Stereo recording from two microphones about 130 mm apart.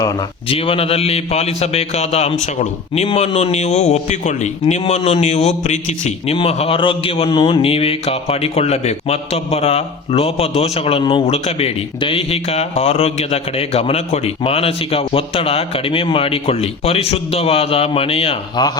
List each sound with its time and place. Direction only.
0.0 s a man's voice: 45° left (ahead or behind); by 6.3 s 60° left (ahead or behind)
6.3 s a man's voice: 50° left (ahead or behind)